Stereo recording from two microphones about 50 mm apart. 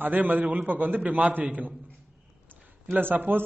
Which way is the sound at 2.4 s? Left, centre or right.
Right.